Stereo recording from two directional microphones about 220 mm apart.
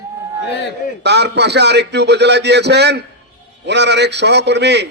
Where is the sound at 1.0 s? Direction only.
50° right (ahead or behind).